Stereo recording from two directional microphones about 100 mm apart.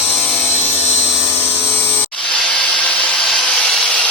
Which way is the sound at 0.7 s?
90° left.